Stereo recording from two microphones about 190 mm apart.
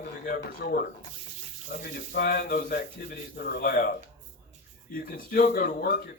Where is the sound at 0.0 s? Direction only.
55° left (ahead or behind).